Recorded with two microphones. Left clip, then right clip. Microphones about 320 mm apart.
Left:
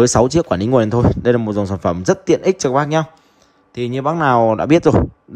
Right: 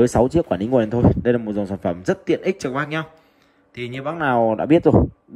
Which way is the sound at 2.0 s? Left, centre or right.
Centre.